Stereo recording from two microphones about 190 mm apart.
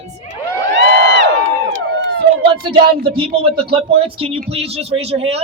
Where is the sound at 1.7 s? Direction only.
90° right.